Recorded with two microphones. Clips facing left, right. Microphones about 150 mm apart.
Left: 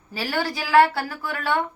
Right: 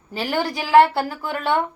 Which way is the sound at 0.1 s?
20° right (ahead or behind).